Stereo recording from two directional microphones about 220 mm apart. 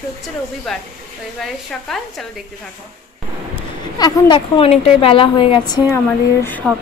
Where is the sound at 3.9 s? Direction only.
20° left (ahead or behind).